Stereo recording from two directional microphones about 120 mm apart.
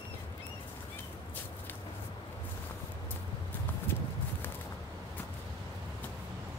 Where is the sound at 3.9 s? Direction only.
20° left (ahead or behind).